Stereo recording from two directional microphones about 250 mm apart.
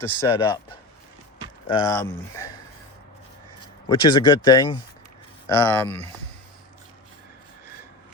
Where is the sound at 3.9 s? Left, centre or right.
Centre.